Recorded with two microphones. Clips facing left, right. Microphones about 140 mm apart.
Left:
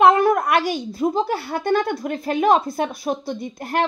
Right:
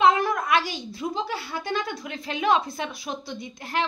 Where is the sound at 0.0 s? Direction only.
55° left (ahead or behind).